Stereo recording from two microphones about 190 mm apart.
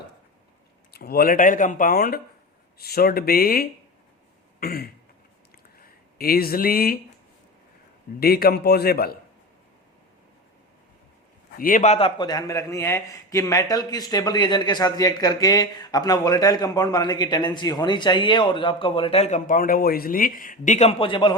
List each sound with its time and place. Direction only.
0.9 s speech: 55° left (ahead or behind)
4.6 s throat clearing: 50° left (ahead or behind)
5.8 s speech: 50° left (ahead or behind)
8.2 s a man's voice: 55° left (ahead or behind)
11.5 s a man's voice: 45° left (ahead or behind); by 21.3 s 25° left (ahead or behind)